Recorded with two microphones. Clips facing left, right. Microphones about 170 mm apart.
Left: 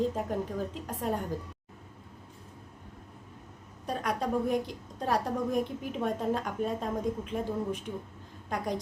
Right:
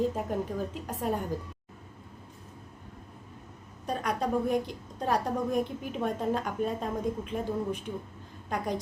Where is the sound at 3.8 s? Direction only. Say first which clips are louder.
Right 1 dB; centre (ahead or behind).